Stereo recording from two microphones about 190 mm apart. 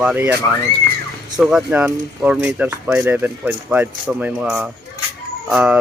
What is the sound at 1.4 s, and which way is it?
Speech, 5° right (ahead or behind).